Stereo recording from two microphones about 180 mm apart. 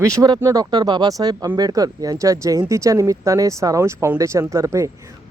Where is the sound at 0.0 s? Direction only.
20° right (ahead or behind).